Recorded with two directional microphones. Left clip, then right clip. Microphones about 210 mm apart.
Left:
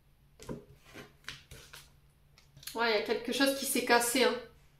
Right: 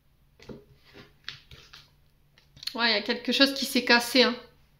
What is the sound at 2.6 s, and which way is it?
Speech, 45° right (ahead or behind).